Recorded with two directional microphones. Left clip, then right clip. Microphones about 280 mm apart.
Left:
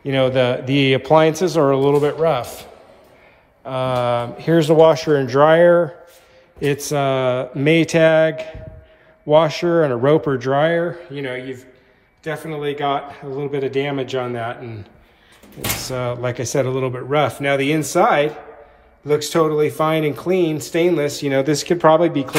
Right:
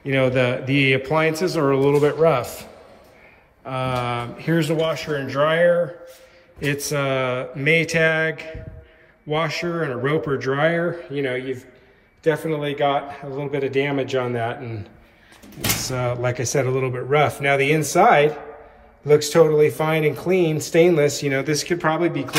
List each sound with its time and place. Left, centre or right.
0.0 s speech: centre
3.6 s speech: centre
15.9 s speech: centre